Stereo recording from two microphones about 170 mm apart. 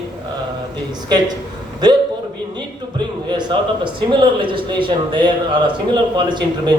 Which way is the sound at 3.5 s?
30° right (ahead or behind).